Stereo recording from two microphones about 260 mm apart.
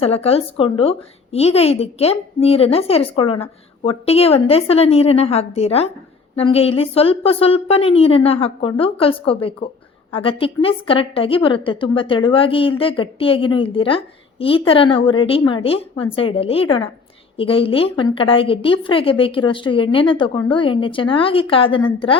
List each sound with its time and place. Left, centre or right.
0.0 s a woman's voice: left